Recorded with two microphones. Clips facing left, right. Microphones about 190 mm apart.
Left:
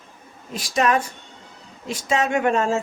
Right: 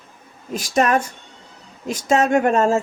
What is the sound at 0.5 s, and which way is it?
A woman's voice, 50° right (ahead or behind).